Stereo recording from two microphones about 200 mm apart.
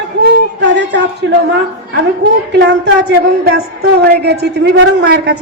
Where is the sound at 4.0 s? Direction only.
60° right (ahead or behind).